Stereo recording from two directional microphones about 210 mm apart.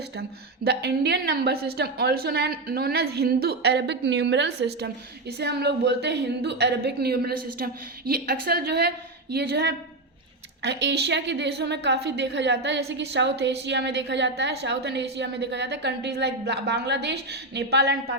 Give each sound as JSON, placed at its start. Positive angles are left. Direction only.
{"t": 0.2, "sound": "a woman's voice", "side_deg": -50}